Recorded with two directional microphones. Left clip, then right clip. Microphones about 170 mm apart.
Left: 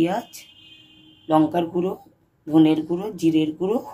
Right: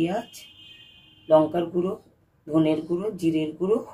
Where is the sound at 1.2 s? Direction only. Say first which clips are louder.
Even; 60° left (ahead or behind).